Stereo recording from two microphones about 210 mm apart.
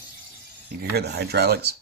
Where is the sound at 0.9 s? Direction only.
50° right (ahead or behind).